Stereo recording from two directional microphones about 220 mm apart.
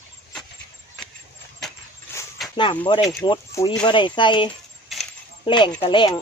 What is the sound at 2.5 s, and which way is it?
Speech, 20° left (ahead or behind).